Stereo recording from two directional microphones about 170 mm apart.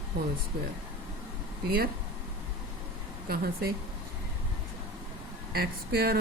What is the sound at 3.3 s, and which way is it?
Speech, 60° right (ahead or behind).